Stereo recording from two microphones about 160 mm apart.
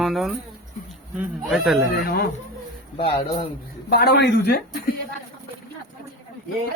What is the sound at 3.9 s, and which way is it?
Speech, 90° left.